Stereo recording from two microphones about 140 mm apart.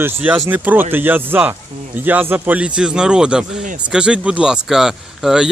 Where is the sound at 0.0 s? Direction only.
10° right (ahead or behind).